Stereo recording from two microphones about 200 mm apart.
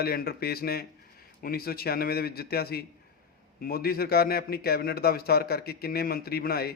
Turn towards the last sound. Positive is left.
turn(degrees=50)  # may be behind; listen again after turning